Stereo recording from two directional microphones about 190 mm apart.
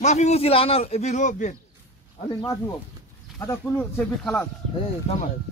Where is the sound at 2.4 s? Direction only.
15° left (ahead or behind).